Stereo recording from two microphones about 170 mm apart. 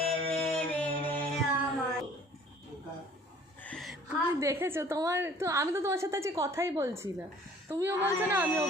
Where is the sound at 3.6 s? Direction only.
Centre (ahead or behind).